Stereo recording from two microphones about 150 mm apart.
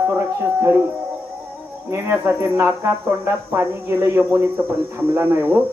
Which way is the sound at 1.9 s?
15° right (ahead or behind).